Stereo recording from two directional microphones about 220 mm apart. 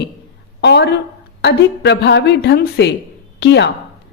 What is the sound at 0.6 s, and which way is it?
A woman's voice, 50° left (ahead or behind).